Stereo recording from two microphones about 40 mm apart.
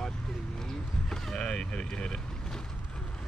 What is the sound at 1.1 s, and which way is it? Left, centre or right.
Speech, centre.